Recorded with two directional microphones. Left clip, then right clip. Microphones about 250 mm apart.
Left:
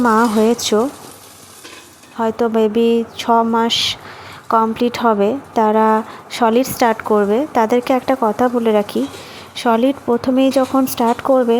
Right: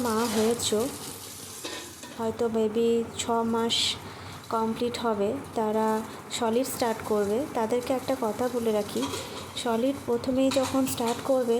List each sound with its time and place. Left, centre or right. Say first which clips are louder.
0.0 s speech: left 13 dB; left
2.1 s speech: left 11 dB; left